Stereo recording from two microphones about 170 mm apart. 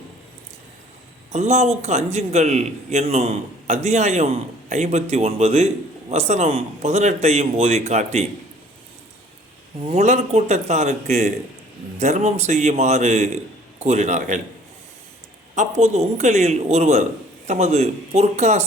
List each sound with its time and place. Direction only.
1.3 s a man's voice: 40° right (ahead or behind)
9.8 s a man's voice: 40° right (ahead or behind)
15.5 s a man's voice: 40° right (ahead or behind)